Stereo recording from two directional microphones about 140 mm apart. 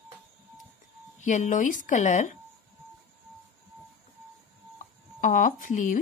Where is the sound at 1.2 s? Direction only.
60° left (ahead or behind).